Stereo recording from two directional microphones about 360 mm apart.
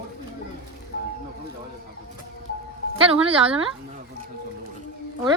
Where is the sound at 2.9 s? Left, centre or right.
Centre.